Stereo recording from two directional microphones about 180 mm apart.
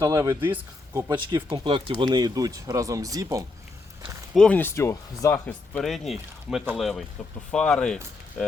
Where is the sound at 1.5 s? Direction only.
30° right (ahead or behind).